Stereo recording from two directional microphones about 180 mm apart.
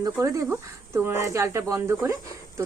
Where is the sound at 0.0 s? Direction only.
15° right (ahead or behind).